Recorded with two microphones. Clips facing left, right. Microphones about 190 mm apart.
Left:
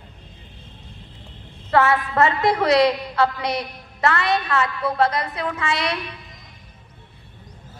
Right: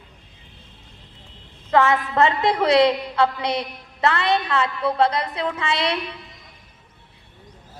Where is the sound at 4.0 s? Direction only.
20° right (ahead or behind).